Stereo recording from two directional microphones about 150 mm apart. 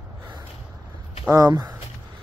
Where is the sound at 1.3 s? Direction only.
20° right (ahead or behind).